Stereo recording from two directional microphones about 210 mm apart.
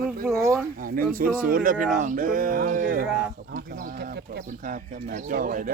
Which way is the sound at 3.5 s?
40° right (ahead or behind).